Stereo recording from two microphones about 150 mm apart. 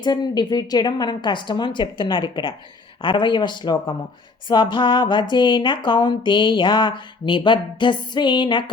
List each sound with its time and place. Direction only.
0.0 s speech: 30° left (ahead or behind)